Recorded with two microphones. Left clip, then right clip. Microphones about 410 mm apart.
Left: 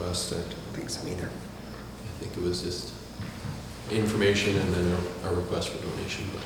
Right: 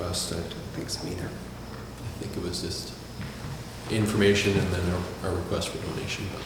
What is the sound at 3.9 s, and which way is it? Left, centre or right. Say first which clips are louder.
Speech: right 2 dB; right.